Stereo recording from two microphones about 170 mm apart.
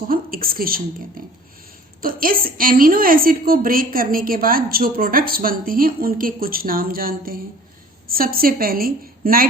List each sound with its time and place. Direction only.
0.1 s a woman's voice: 60° right (ahead or behind)